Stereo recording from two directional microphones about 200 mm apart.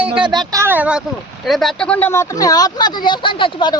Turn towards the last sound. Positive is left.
turn(degrees=25)  # may be behind; listen again after turning